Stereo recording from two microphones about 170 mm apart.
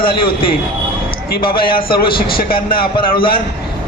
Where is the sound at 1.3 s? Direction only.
60° left (ahead or behind).